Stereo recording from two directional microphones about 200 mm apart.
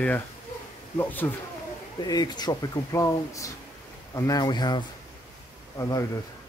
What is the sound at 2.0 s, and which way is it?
Speech, 20° left (ahead or behind).